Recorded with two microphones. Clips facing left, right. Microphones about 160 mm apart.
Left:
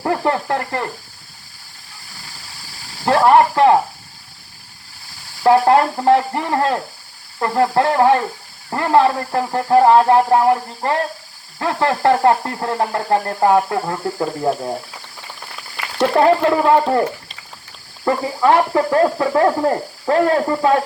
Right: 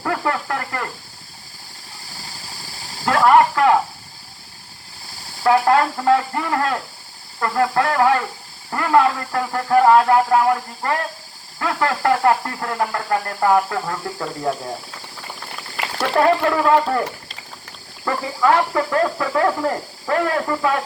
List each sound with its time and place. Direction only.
0.0 s sizzle: 30° left (ahead or behind)
3.1 s speech: 30° left (ahead or behind)
5.4 s speech: 25° left (ahead or behind)
16.0 s speech: 25° left (ahead or behind)
18.0 s speech: 25° left (ahead or behind)